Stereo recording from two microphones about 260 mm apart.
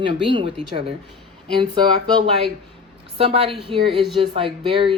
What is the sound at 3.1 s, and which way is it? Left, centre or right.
Speech, right.